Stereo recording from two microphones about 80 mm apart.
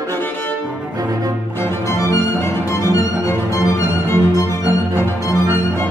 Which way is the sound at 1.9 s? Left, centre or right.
Left.